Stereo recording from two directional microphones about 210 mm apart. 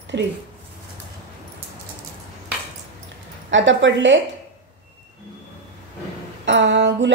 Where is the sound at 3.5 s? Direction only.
60° right (ahead or behind).